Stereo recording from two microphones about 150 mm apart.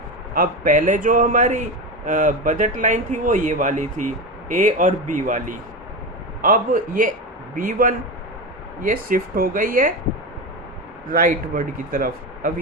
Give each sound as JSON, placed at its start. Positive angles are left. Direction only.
{"t": 0.3, "sound": "speech", "side_deg": -60}
{"t": 11.1, "sound": "speech", "side_deg": -65}